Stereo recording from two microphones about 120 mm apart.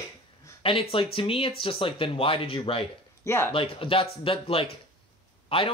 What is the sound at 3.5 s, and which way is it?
Speech, 50° left (ahead or behind).